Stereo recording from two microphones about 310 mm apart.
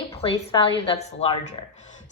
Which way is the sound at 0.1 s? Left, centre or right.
Centre.